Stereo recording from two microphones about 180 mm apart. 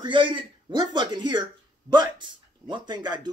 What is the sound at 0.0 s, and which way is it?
Speech, 25° right (ahead or behind).